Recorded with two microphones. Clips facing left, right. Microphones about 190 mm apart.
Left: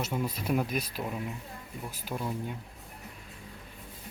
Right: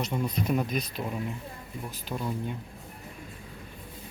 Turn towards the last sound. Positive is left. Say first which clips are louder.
# right 2 dB
turn(degrees=5)  # may be behind; listen again after turning